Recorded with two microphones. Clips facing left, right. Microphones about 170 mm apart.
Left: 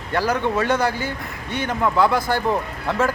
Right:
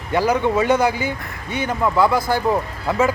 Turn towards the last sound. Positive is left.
turn(degrees=-5)  # may be behind; listen again after turning